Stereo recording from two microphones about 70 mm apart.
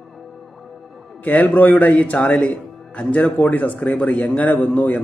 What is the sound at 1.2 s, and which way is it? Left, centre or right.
Speech, left.